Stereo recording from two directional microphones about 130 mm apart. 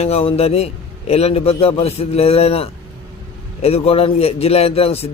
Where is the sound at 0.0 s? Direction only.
50° left (ahead or behind).